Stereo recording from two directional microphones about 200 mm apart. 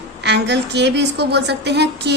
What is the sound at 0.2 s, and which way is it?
A woman's voice, 60° right (ahead or behind).